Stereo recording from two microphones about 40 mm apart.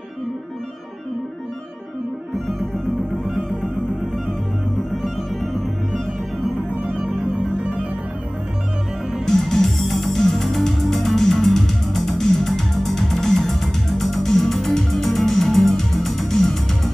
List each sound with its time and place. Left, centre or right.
4.9 s music: centre
7.0 s music: right
9.2 s music: centre